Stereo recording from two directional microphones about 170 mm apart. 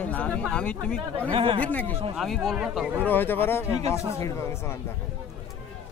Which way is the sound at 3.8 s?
40° right (ahead or behind).